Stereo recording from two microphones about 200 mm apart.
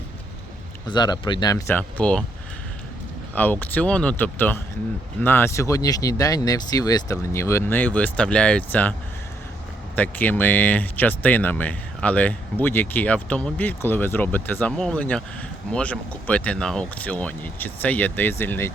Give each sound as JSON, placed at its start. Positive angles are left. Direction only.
{"t": 0.9, "sound": "speech", "side_deg": 20}
{"t": 3.3, "sound": "speech", "side_deg": 10}